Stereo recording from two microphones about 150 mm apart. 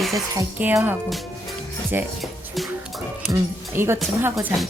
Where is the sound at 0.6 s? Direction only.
10° right (ahead or behind).